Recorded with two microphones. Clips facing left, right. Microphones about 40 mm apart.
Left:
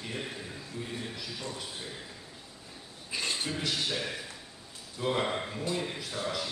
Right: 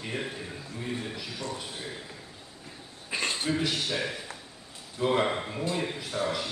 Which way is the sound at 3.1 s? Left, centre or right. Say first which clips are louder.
Right 4 dB; right.